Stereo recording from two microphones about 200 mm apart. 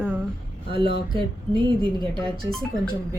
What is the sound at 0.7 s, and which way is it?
Speech, 25° right (ahead or behind).